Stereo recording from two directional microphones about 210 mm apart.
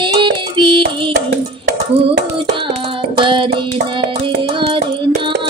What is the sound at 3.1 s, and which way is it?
Child singing, 25° right (ahead or behind).